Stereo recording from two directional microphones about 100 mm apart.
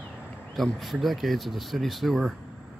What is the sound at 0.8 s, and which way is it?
Speech, centre (ahead or behind).